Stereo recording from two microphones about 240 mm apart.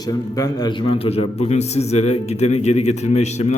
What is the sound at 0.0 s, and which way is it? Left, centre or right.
A man's voice, centre.